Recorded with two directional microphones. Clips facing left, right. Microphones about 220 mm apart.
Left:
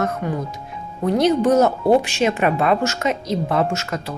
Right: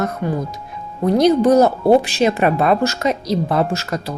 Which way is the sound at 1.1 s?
35° right (ahead or behind).